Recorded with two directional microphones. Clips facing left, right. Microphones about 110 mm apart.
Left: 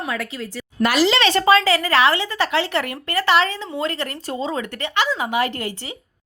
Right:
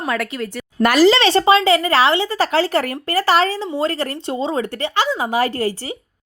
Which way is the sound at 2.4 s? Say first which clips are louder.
Right 4 dB; 40° right (ahead or behind).